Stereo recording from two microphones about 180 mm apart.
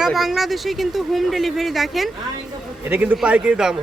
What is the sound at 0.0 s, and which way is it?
A man's voice, centre (ahead or behind).